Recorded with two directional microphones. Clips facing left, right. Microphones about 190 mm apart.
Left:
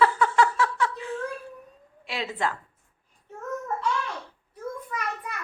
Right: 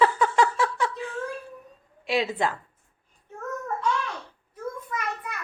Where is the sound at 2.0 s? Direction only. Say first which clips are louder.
Right 5 dB; 15° right (ahead or behind).